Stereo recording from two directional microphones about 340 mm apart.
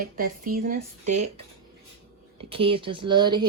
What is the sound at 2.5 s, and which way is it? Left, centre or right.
Speech, centre.